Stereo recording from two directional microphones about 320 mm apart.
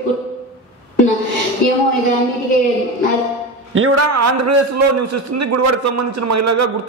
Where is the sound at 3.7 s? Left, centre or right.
Right.